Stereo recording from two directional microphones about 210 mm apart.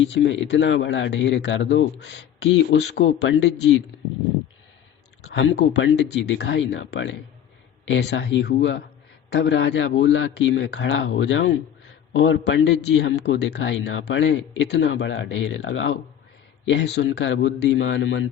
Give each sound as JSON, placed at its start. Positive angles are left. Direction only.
{"t": 0.1, "sound": "a man's voice", "side_deg": 60}
{"t": 5.3, "sound": "a man's voice", "side_deg": 60}